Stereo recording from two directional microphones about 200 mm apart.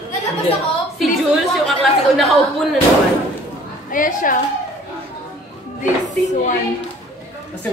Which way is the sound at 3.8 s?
40° left (ahead or behind).